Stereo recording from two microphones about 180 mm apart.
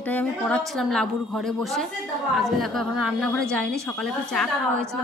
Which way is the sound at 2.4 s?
Centre (ahead or behind).